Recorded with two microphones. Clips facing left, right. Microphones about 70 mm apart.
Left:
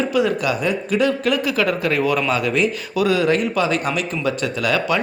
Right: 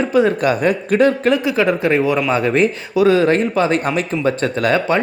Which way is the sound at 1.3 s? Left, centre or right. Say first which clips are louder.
Right 3 dB; right.